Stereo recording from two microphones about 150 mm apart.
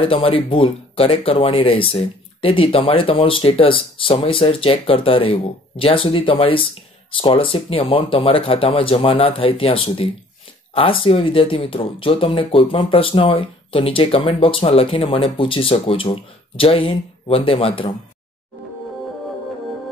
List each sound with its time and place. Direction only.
0.0 s speech: 40° left (ahead or behind)